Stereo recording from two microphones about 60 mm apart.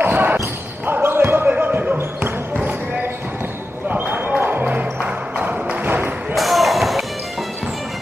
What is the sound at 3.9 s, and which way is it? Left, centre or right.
Basketball bounce, right.